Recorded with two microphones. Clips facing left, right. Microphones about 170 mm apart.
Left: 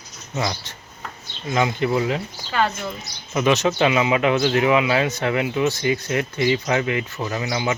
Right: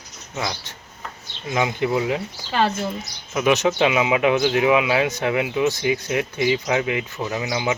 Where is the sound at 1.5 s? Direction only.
15° right (ahead or behind).